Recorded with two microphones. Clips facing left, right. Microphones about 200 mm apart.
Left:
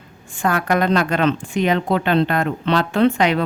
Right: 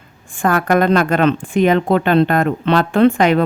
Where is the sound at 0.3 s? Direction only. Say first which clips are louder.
Right 4 dB; 50° right (ahead or behind).